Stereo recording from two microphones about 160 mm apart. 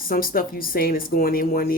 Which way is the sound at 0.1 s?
65° left (ahead or behind).